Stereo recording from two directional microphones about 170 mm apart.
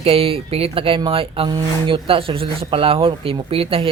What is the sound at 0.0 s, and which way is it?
Speech, 35° right (ahead or behind).